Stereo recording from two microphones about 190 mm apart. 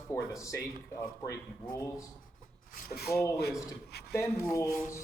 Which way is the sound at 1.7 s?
15° left (ahead or behind).